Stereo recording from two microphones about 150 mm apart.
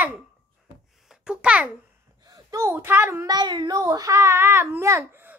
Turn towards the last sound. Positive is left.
turn(degrees=-20)  # may be behind; listen again after turning